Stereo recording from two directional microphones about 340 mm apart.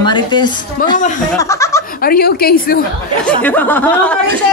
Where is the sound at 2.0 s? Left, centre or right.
Left.